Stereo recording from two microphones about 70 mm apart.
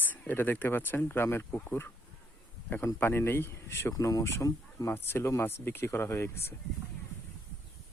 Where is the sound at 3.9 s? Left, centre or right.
Left.